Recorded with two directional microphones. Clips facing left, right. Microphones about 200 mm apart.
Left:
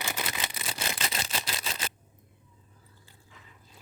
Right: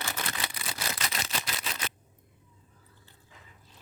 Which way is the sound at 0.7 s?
25° left (ahead or behind).